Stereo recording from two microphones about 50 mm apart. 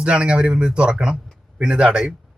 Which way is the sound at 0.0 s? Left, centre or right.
Right.